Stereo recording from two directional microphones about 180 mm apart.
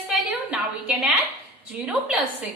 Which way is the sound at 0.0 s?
10° right (ahead or behind).